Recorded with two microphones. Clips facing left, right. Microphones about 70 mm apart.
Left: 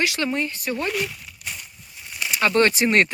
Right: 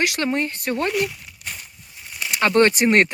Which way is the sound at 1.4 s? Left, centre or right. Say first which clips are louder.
Right 1 dB; right.